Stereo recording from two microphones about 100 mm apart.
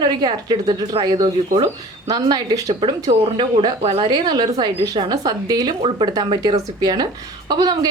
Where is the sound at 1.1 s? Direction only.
65° right (ahead or behind).